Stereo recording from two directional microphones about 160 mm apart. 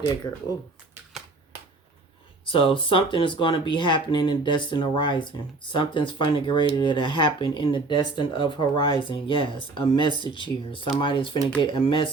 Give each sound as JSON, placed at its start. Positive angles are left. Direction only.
{"t": 2.4, "sound": "speech", "side_deg": 35}